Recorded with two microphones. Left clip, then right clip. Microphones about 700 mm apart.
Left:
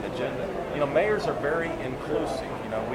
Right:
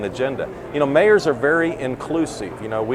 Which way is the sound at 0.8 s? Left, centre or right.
Right.